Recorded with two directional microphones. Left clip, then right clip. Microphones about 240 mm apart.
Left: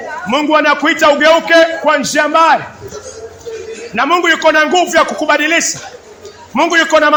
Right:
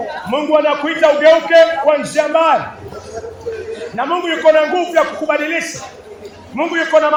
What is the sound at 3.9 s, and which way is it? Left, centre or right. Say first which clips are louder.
A man's voice: left 7 dB; left.